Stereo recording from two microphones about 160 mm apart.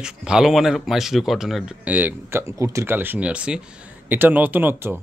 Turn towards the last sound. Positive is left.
turn(degrees=-15)  # may be behind; listen again after turning